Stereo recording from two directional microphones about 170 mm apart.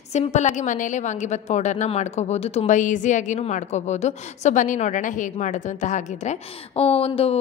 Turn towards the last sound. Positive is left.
turn(degrees=35)  # may be behind; listen again after turning